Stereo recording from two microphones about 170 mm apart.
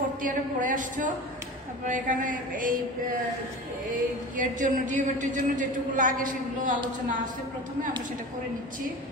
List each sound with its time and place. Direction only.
0.2 s a man's voice: 50° right (ahead or behind)
3.9 s a man's voice: 50° right (ahead or behind)